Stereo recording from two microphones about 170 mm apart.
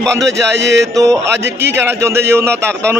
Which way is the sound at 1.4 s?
85° right.